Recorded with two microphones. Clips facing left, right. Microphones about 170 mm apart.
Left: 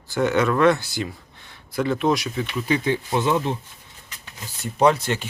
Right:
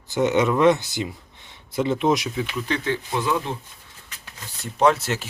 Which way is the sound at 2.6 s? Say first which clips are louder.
Left 6 dB; 10° left (ahead or behind).